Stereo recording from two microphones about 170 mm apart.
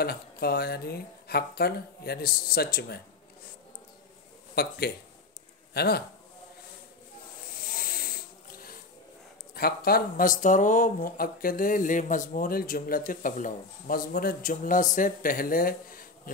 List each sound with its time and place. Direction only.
0.0 s speech: 65° left (ahead or behind)
4.6 s a man's voice: 70° left (ahead or behind)
7.6 s snake: 55° left (ahead or behind)
9.6 s speech: 60° left (ahead or behind)